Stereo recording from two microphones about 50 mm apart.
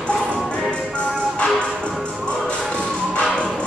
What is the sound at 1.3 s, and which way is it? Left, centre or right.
Music, centre.